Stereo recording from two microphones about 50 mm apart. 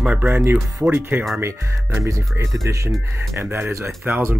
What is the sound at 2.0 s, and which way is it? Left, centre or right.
Speech, right.